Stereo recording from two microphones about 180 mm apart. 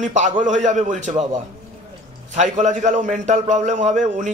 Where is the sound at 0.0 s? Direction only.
40° right (ahead or behind).